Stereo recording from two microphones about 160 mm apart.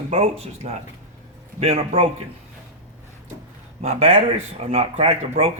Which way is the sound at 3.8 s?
40° right (ahead or behind).